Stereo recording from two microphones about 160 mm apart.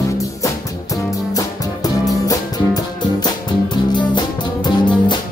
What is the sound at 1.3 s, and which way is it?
Music, 20° left (ahead or behind).